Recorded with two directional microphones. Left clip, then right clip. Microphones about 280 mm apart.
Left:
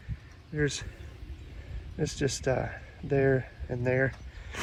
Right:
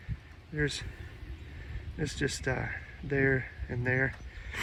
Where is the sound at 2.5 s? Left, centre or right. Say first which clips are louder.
Left 4 dB; centre.